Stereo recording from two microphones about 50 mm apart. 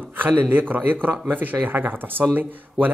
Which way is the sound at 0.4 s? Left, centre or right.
Right.